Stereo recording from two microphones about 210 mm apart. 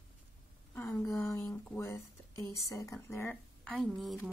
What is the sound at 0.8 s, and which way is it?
A woman's voice, 10° left (ahead or behind).